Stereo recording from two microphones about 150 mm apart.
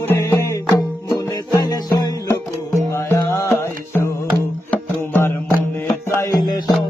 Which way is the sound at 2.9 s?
20° left (ahead or behind).